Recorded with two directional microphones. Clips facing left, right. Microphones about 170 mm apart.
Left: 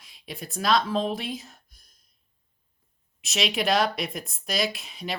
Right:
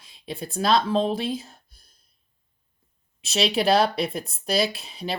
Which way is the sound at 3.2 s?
30° right (ahead or behind).